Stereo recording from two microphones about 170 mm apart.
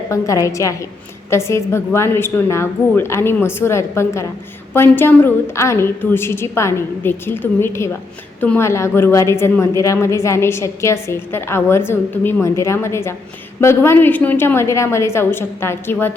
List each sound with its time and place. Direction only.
0.1 s a woman's voice: 20° left (ahead or behind)